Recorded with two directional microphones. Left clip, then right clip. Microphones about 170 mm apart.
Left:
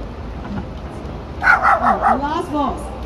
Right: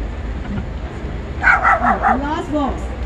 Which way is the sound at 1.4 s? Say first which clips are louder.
Even; 35° left (ahead or behind).